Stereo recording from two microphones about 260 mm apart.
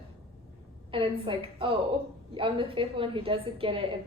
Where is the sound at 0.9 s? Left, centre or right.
Centre.